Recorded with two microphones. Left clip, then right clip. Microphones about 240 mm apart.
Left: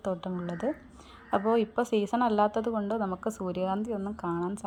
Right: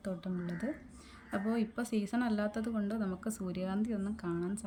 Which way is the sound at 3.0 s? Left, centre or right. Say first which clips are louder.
Left 8 dB; right.